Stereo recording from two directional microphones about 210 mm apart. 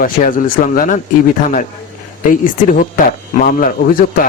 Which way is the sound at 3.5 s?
40° left (ahead or behind).